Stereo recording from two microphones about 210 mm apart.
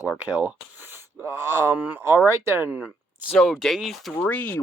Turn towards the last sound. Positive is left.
turn(degrees=10)  # may be behind; listen again after turning